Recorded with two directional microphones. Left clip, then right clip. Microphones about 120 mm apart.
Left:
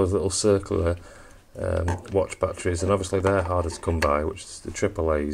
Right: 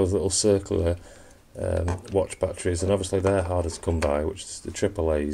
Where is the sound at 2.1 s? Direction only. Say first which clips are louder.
Left 1 dB; 10° right (ahead or behind).